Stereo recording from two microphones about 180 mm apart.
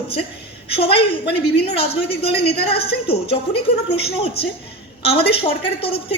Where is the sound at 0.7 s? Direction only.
30° left (ahead or behind).